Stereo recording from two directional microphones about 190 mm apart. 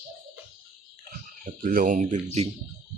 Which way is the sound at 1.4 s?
45° right (ahead or behind).